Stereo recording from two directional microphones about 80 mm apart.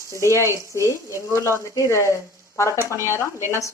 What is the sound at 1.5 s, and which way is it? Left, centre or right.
Speech, left.